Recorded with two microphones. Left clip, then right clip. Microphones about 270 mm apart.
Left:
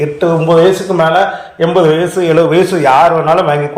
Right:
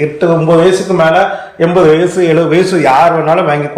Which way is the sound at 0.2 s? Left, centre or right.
Left.